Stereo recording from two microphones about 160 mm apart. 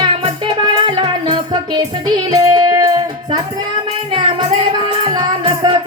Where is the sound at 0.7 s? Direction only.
30° right (ahead or behind).